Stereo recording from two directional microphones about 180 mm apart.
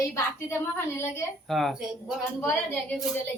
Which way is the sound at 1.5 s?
Centre (ahead or behind).